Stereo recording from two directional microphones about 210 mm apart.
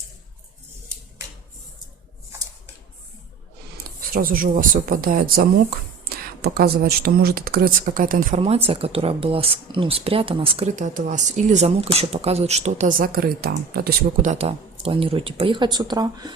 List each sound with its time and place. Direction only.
4.1 s speech: 45° right (ahead or behind); by 16.3 s 20° right (ahead or behind)